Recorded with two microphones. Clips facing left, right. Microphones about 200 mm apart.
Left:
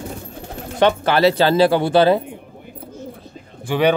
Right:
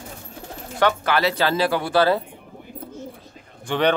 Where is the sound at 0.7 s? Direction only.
25° left (ahead or behind).